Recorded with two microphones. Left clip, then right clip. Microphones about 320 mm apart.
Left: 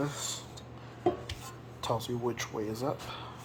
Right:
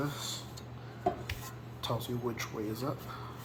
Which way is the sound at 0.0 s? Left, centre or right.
Left.